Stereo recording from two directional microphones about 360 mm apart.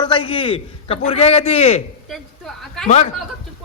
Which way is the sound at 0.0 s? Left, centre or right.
Centre.